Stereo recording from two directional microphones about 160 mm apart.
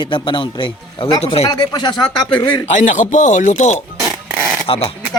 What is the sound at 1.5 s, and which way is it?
Speech, 25° left (ahead or behind).